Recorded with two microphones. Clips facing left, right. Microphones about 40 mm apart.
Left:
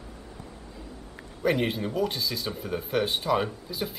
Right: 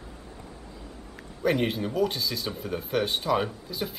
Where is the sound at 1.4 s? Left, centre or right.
Centre.